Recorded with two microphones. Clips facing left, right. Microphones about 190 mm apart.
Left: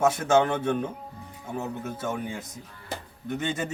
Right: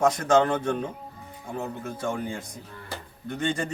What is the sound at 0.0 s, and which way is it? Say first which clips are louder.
A man's voice: right 1 dB; 5° left (ahead or behind).